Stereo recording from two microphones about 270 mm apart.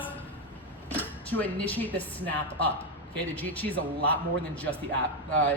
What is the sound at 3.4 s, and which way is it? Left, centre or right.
Speech, centre.